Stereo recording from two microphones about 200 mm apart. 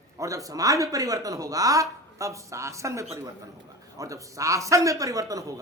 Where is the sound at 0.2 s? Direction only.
15° right (ahead or behind).